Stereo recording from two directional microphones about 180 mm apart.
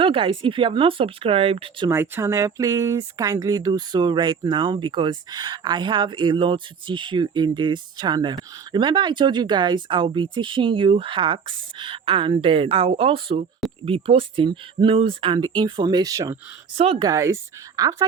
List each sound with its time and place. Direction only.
0.0 s speech: 30° right (ahead or behind)
1.9 s speech: 15° right (ahead or behind)
16.7 s speech: 30° right (ahead or behind)
17.1 s speech: 15° right (ahead or behind)